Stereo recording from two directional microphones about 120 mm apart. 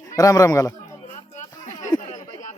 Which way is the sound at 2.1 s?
90° left.